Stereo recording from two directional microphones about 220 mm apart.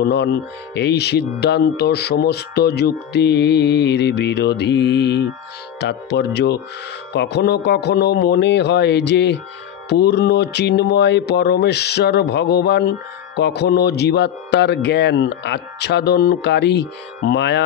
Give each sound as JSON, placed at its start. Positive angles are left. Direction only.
{"t": 0.0, "sound": "speech", "side_deg": 50}